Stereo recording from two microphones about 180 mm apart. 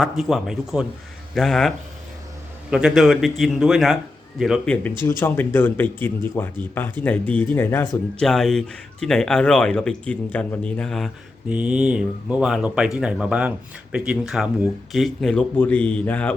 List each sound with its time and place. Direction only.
0.0 s speech: centre (ahead or behind)